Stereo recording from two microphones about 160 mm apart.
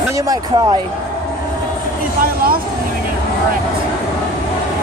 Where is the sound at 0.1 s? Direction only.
20° right (ahead or behind).